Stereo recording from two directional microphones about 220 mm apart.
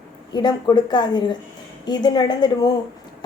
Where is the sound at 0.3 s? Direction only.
20° left (ahead or behind).